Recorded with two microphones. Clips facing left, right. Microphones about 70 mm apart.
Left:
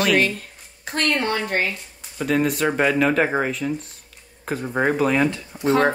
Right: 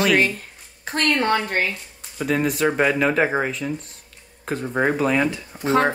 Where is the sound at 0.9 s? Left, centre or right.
Right.